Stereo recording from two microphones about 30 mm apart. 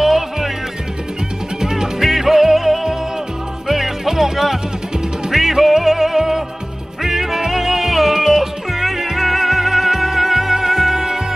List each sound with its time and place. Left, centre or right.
0.0 s music: centre
1.6 s music: centre
2.0 s music: centre